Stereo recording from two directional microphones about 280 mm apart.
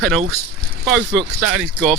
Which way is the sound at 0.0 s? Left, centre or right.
Centre.